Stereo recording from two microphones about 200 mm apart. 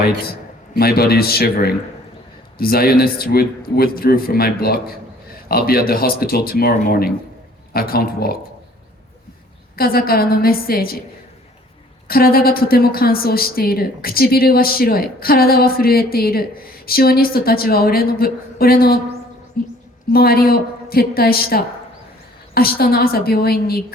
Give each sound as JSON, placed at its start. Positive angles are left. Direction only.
{"t": 0.8, "sound": "a woman's voice", "side_deg": 50}
{"t": 9.7, "sound": "a woman's voice", "side_deg": 50}
{"t": 12.0, "sound": "a woman's voice", "side_deg": 50}